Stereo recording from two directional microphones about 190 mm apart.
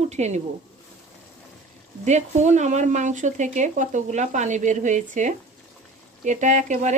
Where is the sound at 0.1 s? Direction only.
35° right (ahead or behind).